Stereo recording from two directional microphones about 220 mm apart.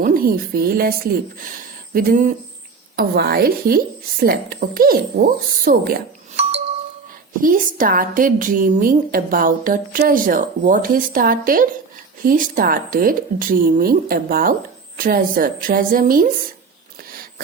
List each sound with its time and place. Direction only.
0.0 s a woman's voice: 40° right (ahead or behind)
7.4 s a woman's voice: 40° right (ahead or behind)